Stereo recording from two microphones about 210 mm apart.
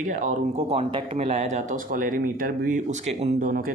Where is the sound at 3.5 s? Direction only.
45° right (ahead or behind).